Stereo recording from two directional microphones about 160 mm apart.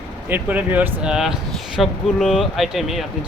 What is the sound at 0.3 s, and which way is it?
Speech, 10° right (ahead or behind).